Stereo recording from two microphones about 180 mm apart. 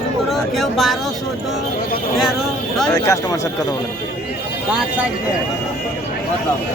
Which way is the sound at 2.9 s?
20° left (ahead or behind).